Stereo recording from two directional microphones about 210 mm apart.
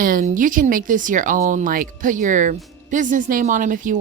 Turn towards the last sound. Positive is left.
turn(degrees=-40)  # may be behind; listen again after turning